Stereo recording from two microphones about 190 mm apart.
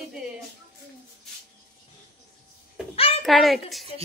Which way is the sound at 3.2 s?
Centre (ahead or behind).